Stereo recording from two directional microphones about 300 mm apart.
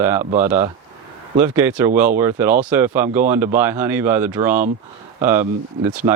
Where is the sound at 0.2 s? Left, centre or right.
Right.